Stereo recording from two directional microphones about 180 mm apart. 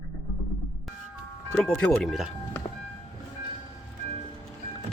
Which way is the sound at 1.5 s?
Centre (ahead or behind).